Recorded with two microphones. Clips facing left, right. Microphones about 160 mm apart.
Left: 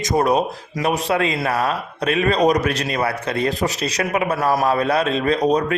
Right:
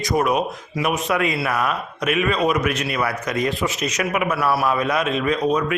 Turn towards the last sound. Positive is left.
turn(degrees=35)  # may be behind; listen again after turning